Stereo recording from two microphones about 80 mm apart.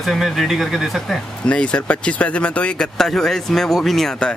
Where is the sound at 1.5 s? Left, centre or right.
Centre.